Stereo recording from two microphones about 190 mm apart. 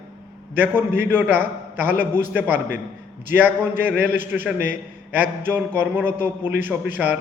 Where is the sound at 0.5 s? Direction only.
10° right (ahead or behind).